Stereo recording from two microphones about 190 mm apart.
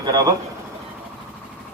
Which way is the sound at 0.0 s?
20° right (ahead or behind).